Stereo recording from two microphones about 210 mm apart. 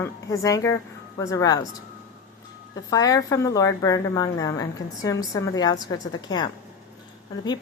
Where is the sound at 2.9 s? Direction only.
15° left (ahead or behind).